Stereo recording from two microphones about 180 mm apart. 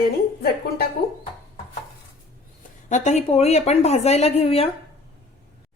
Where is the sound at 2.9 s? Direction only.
40° left (ahead or behind).